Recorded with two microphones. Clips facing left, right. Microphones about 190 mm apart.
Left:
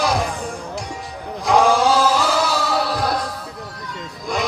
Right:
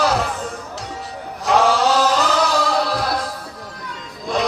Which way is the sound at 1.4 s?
15° left (ahead or behind).